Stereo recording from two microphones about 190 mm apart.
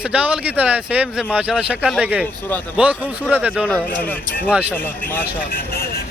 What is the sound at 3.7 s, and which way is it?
Speech, 10° left (ahead or behind).